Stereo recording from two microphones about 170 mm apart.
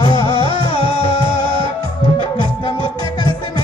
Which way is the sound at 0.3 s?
30° right (ahead or behind).